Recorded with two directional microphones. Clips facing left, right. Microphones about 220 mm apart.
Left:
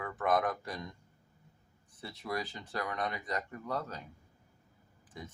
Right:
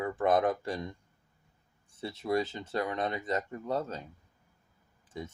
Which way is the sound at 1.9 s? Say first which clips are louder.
Right 8 dB; 25° right (ahead or behind).